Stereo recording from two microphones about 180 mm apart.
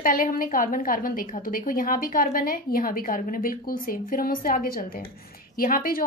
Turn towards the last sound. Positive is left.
turn(degrees=55)  # may be behind; listen again after turning